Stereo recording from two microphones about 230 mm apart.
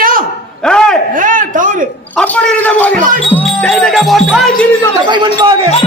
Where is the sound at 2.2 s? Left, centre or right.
Centre.